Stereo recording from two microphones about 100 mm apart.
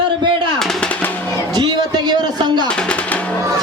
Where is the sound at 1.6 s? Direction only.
45° right (ahead or behind).